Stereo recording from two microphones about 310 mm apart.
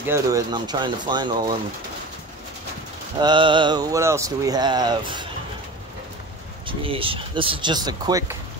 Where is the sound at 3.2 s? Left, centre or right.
Centre.